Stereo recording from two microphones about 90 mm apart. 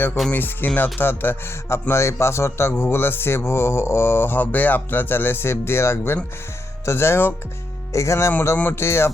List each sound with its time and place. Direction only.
0.3 s speech: 20° left (ahead or behind)
8.3 s speech: 20° left (ahead or behind)